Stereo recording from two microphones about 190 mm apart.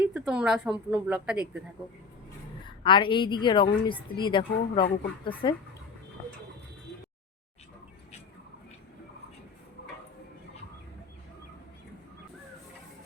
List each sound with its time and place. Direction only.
0.0 s speech: 5° right (ahead or behind)
2.6 s a woman's voice: 25° left (ahead or behind)